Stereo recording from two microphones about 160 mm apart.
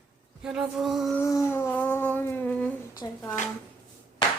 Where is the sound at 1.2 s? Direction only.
20° left (ahead or behind).